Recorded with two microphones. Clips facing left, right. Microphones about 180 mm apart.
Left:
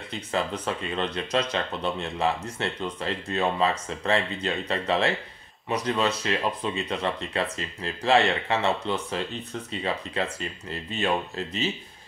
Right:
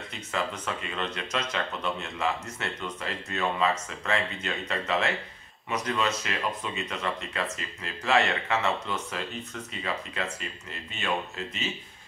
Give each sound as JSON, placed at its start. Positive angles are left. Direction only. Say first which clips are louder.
{"t": 0.9, "sound": "speech", "louder": "left 7 dB", "side_deg": 30}